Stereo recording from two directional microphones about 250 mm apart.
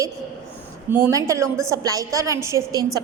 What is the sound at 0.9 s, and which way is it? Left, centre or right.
A woman's voice, centre.